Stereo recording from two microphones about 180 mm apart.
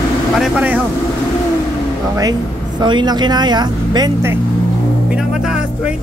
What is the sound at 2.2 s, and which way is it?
Speech, 20° right (ahead or behind).